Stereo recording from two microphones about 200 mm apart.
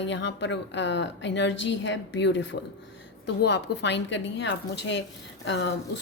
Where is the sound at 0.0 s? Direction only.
60° left (ahead or behind).